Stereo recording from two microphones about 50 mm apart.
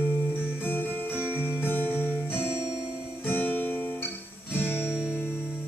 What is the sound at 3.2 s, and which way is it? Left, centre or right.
Guitar, left.